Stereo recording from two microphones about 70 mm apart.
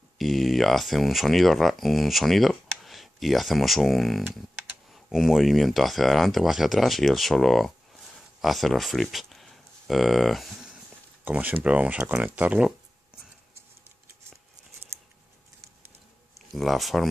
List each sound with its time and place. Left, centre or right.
0.2 s speech: centre
11.2 s speech: right
16.3 s speech: centre